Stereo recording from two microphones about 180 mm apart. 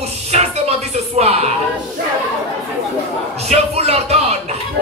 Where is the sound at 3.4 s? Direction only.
35° right (ahead or behind).